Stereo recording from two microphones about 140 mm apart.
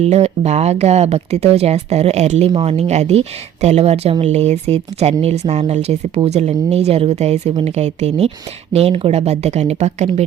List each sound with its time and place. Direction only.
0.0 s speech: 50° right (ahead or behind)
2.5 s speech: 40° right (ahead or behind); by 10.2 s 55° right (ahead or behind)